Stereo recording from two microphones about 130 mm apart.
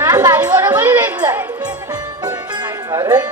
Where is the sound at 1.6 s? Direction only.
30° right (ahead or behind).